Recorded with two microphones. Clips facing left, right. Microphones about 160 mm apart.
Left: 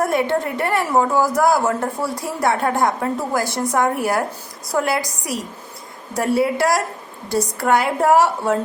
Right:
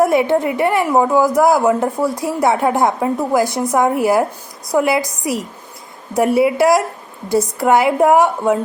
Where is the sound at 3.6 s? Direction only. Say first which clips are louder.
Right 2 dB; 20° right (ahead or behind).